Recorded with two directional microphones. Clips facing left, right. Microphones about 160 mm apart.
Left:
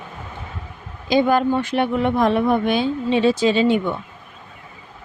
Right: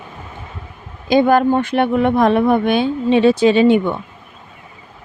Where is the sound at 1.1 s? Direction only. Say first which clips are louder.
Right 4 dB; 55° right (ahead or behind).